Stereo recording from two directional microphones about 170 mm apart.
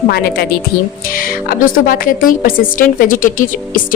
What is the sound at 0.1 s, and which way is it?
Speech, 65° left (ahead or behind).